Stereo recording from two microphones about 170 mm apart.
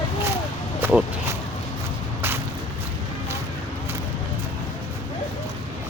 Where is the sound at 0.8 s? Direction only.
10° right (ahead or behind).